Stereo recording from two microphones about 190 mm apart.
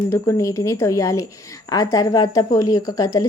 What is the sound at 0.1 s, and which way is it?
A woman's voice, 15° left (ahead or behind).